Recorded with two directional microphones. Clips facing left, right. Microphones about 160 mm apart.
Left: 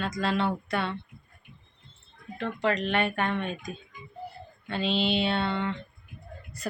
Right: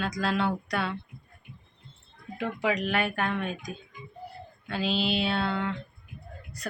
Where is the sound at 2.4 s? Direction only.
10° right (ahead or behind).